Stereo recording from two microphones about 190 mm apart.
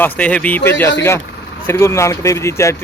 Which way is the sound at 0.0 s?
10° left (ahead or behind).